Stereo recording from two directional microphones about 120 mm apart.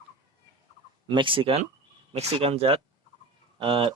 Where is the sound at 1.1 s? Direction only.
45° right (ahead or behind).